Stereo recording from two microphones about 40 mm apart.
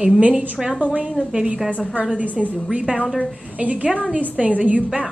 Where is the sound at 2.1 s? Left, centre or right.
Right.